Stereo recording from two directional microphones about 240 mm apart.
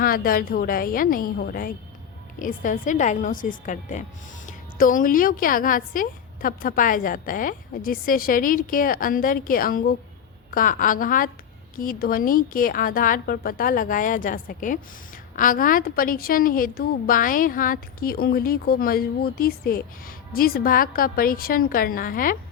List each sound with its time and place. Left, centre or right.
0.0 s a woman's voice: left